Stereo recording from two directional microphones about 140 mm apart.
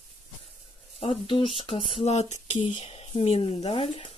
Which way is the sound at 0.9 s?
40° left (ahead or behind).